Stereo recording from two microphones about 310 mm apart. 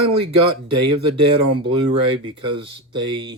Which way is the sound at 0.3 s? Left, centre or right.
Centre.